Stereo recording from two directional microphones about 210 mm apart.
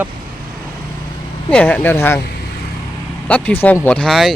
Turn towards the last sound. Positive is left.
turn(degrees=0)  # may be behind; listen again after turning